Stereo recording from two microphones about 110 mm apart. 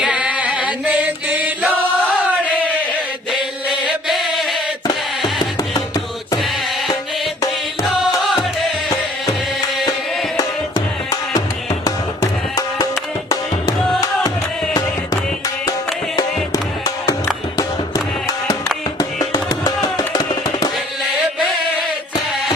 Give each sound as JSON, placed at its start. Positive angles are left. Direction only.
{"t": 0.0, "sound": "chant", "side_deg": -10}
{"t": 3.8, "sound": "chant", "side_deg": 0}
{"t": 10.3, "sound": "music", "side_deg": 35}
{"t": 14.0, "sound": "music", "side_deg": 30}